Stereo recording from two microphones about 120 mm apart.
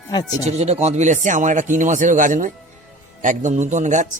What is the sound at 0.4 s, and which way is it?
Speech, 70° right (ahead or behind).